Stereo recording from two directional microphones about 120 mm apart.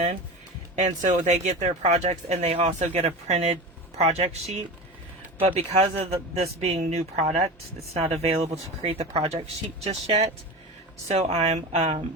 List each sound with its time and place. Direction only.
0.8 s speech: 80° right; by 12.0 s 55° right (ahead or behind)